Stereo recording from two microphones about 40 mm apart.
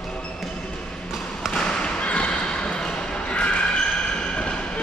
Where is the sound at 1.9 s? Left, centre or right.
Left.